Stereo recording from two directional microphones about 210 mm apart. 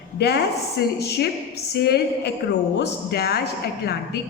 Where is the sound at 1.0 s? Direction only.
50° left (ahead or behind).